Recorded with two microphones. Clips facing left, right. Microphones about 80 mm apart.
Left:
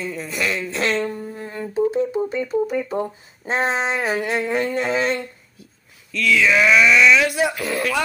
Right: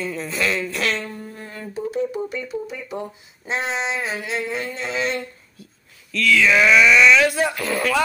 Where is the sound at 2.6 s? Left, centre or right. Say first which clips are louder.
Left 7 dB; left.